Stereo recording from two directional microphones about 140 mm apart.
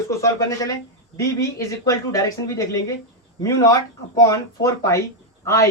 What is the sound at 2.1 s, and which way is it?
A woman's voice, 25° left (ahead or behind).